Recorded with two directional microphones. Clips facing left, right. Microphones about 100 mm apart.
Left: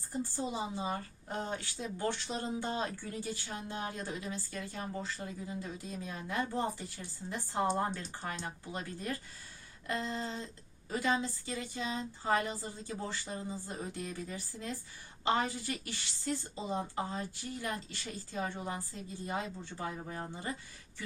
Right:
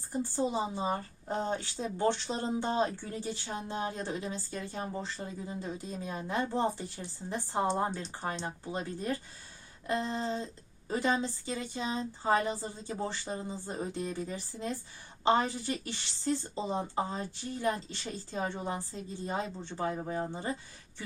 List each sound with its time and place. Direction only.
0.3 s speech: 25° right (ahead or behind)
20.1 s speech: 25° right (ahead or behind)